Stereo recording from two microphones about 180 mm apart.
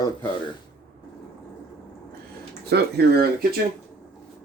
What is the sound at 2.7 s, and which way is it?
Speech, 65° right (ahead or behind).